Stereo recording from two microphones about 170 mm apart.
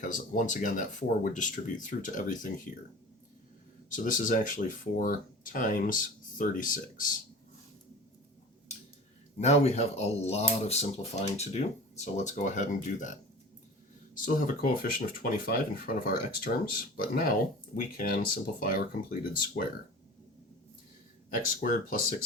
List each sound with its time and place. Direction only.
0.0 s speech: 50° left (ahead or behind)
3.8 s speech: 50° left (ahead or behind)
9.4 s speech: 40° left (ahead or behind)
14.3 s speech: 55° left (ahead or behind)
21.2 s speech: 55° left (ahead or behind)